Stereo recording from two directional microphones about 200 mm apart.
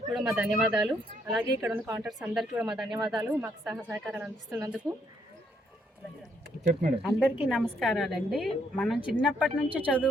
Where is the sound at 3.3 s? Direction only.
10° right (ahead or behind).